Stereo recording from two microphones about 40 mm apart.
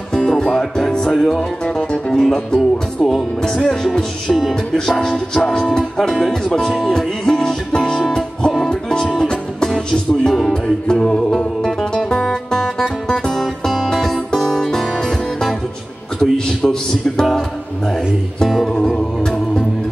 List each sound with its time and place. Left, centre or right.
0.1 s music: centre
1.7 s music: left
4.3 s speech: centre
4.9 s music: centre
10.5 s music: left
11.3 s music: centre
13.4 s music: centre
16.2 s a sound: centre
17.2 s music: centre
18.7 s music: left